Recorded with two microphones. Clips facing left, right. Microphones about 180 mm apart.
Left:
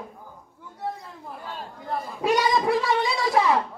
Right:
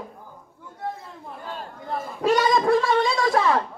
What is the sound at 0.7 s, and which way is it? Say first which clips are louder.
Chatter: even; centre (ahead or behind).